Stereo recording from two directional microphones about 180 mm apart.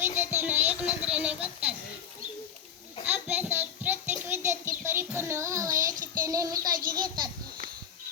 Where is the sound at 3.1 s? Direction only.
10° right (ahead or behind).